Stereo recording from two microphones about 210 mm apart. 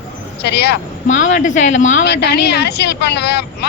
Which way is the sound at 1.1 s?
35° left (ahead or behind).